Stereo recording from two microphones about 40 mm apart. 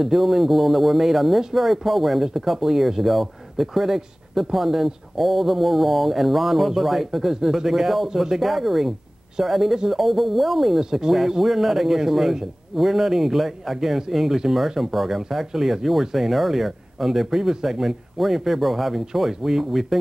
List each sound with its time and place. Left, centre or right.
0.0 s speech: centre
10.8 s a man's voice: centre